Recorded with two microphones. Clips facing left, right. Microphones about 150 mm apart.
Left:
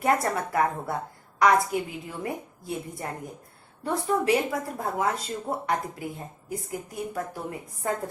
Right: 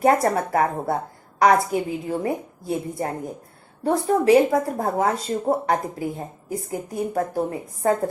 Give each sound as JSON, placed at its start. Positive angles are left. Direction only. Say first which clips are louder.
{"t": 0.0, "sound": "a woman's voice", "louder": "right 6 dB", "side_deg": -35}